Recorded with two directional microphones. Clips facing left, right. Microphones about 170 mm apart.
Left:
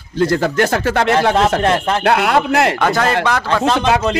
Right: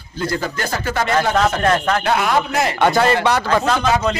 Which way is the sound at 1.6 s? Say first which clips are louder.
Left 1 dB; 25° left (ahead or behind).